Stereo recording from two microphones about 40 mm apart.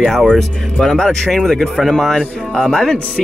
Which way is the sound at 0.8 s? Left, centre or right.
Centre.